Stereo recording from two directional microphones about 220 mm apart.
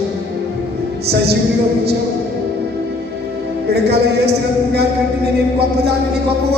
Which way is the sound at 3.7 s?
45° right (ahead or behind).